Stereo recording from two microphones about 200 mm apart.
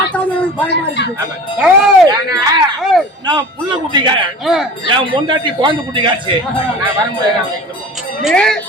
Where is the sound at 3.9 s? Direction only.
25° right (ahead or behind).